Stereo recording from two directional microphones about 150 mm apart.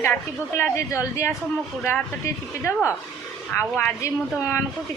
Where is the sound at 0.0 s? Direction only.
15° left (ahead or behind).